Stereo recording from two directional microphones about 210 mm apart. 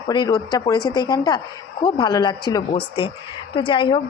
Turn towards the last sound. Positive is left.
turn(degrees=20)  # may be behind; listen again after turning